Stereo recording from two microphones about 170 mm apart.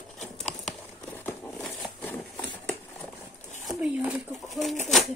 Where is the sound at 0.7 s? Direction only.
10° left (ahead or behind).